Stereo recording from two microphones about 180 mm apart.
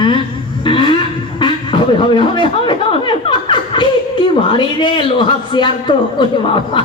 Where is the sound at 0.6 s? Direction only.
30° left (ahead or behind).